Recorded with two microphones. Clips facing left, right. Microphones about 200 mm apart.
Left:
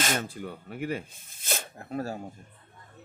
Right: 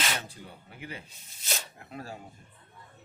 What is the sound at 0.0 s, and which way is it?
Speech, 50° left (ahead or behind).